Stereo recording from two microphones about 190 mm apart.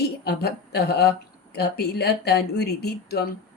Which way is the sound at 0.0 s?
60° left (ahead or behind).